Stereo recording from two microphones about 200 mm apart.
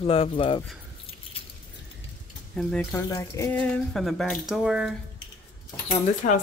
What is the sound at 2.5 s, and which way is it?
Speech, 5° left (ahead or behind).